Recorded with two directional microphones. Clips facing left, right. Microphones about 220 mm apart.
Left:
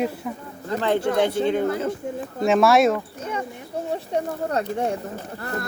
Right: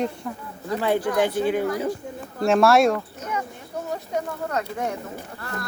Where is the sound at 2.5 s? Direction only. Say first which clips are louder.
Even; centre (ahead or behind).